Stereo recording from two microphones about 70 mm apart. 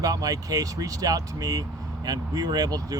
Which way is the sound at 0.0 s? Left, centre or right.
Right.